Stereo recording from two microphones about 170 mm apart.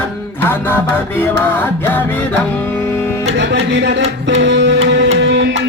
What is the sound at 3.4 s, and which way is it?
A man's voice, 90° right.